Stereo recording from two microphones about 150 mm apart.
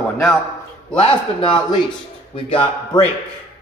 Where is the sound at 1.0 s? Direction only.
40° left (ahead or behind).